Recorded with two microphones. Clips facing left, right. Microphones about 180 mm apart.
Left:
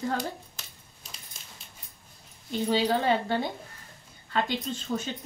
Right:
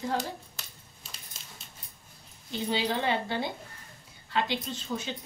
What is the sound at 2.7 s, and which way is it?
A woman's voice, 40° left (ahead or behind).